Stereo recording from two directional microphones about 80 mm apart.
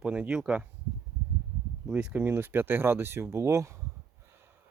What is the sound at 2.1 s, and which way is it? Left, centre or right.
Speech, right.